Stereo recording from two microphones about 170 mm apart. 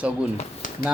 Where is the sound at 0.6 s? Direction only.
50° left (ahead or behind).